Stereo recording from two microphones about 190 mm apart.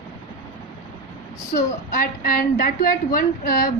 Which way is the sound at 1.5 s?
45° left (ahead or behind).